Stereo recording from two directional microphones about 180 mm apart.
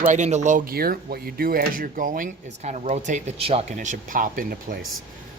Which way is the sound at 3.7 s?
50° right (ahead or behind).